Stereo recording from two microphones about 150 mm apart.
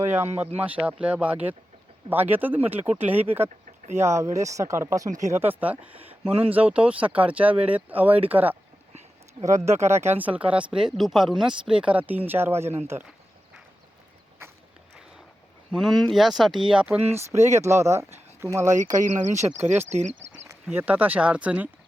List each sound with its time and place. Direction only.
0.0 s speech: 15° right (ahead or behind)
9.6 s speech: 15° right (ahead or behind)
15.7 s speech: centre (ahead or behind)
17.0 s speech: 45° right (ahead or behind)
17.3 s speech: 20° right (ahead or behind)
19.9 s speech: 50° right (ahead or behind)
20.5 s speech: 15° right (ahead or behind)